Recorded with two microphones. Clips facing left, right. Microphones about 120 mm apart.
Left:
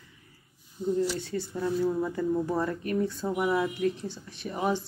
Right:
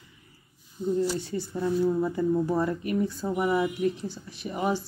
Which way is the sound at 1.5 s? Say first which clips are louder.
Right 3 dB; centre (ahead or behind).